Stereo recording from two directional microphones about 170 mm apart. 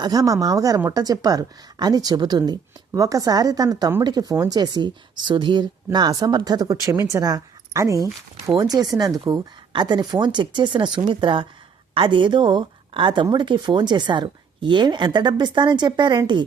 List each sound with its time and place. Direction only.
0.0 s a woman's voice: 20° right (ahead or behind)